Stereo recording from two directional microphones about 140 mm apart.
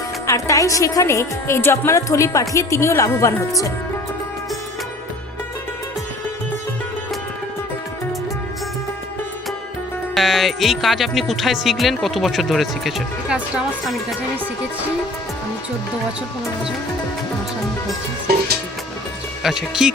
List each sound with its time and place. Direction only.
0.3 s a woman's voice: 20° left (ahead or behind)
10.2 s speech: centre (ahead or behind)
19.4 s speech: 5° right (ahead or behind)